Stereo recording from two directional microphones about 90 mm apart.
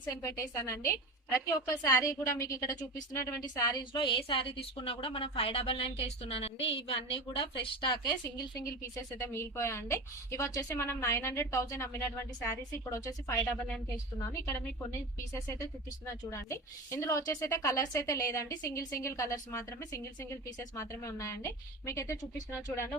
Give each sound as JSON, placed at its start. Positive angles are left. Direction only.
{"t": 0.1, "sound": "a woman's voice", "side_deg": 35}
{"t": 3.9, "sound": "a woman's voice", "side_deg": 65}
{"t": 9.1, "sound": "a woman's voice", "side_deg": 25}
{"t": 14.5, "sound": "a woman's voice", "side_deg": 30}